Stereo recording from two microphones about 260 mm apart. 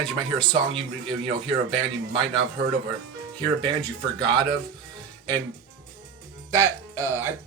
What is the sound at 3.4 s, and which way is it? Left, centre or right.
Speech, centre.